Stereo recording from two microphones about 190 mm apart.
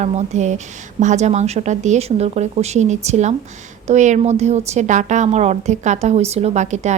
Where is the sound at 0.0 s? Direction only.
35° right (ahead or behind).